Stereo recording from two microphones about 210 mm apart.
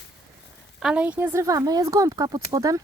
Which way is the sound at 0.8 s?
5° right (ahead or behind).